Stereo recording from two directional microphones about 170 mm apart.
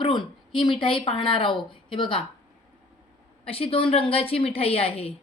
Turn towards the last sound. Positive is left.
turn(degrees=35)  # may be behind; listen again after turning